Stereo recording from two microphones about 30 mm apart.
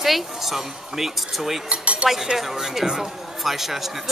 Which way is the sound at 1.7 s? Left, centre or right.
Right.